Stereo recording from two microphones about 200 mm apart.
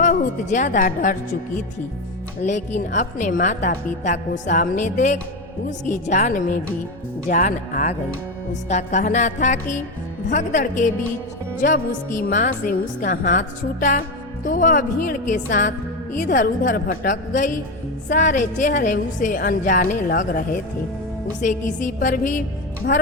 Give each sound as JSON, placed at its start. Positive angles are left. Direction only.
{"t": 0.0, "sound": "speech", "side_deg": 40}
{"t": 2.5, "sound": "a woman's voice", "side_deg": 35}